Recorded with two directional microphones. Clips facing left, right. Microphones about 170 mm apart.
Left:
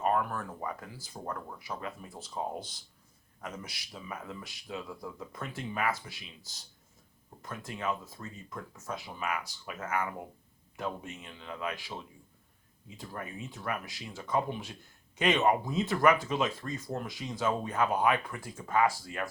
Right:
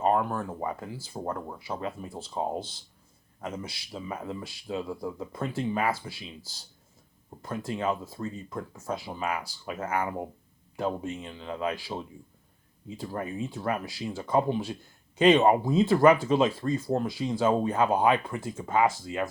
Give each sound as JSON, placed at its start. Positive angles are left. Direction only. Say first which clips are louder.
{"t": 0.0, "sound": "speech", "louder": "right 4 dB", "side_deg": -25}